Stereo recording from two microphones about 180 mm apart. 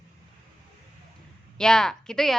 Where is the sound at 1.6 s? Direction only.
5° left (ahead or behind).